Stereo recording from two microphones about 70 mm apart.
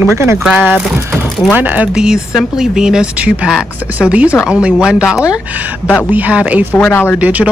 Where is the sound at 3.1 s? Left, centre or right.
Centre.